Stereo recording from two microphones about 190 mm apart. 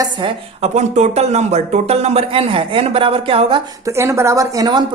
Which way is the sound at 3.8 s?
15° right (ahead or behind).